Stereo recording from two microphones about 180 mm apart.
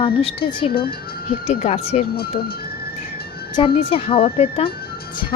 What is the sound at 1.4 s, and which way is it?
Speech, 35° left (ahead or behind).